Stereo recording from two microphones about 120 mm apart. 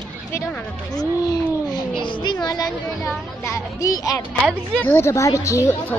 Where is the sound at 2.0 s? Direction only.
40° left (ahead or behind).